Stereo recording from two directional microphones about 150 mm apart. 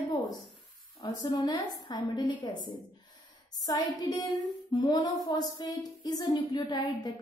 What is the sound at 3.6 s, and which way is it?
A woman's voice, 25° left (ahead or behind).